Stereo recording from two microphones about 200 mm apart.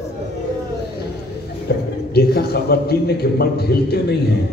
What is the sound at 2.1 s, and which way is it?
A man's voice, 50° left (ahead or behind).